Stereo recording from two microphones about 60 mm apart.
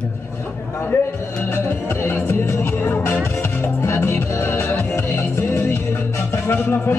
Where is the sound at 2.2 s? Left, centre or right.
Left.